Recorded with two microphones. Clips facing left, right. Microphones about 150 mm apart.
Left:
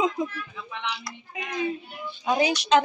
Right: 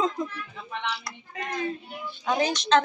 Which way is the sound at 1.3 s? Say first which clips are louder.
Left 2 dB; 10° left (ahead or behind).